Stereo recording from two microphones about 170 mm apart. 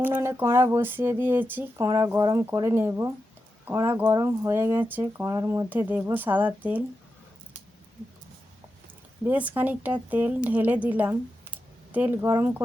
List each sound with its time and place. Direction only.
0.0 s speech: 15° right (ahead or behind)
9.2 s speech: 10° right (ahead or behind)